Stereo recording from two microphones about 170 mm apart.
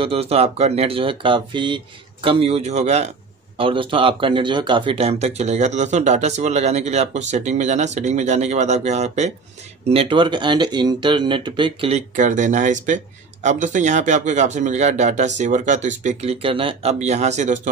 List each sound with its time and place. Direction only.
0.0 s speech: 35° right (ahead or behind)
3.5 s speech: 30° right (ahead or behind)
12.2 s speech: 45° right (ahead or behind)